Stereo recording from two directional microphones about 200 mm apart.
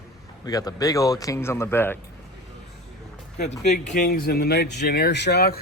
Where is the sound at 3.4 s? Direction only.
35° left (ahead or behind).